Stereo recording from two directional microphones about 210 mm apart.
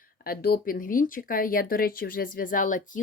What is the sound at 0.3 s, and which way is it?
Speech, 45° left (ahead or behind).